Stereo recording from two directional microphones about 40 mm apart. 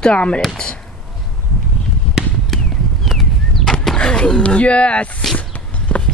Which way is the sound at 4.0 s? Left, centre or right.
Left.